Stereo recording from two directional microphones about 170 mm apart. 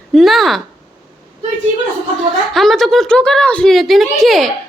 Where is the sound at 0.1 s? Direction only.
Centre (ahead or behind).